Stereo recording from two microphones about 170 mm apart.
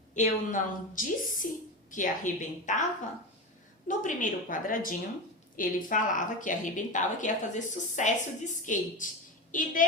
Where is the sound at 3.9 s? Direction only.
50° left (ahead or behind).